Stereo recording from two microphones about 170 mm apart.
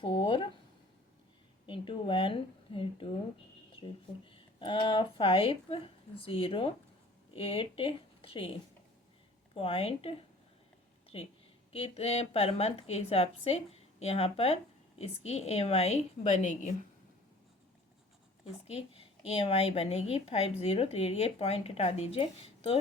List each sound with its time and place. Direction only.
0.0 s a sound: 30° left (ahead or behind)
1.6 s a woman's voice: 30° left (ahead or behind)
4.3 s a woman's voice: 30° left (ahead or behind)
9.6 s a woman's voice: 35° left (ahead or behind)
18.7 s a woman's voice: 35° left (ahead or behind)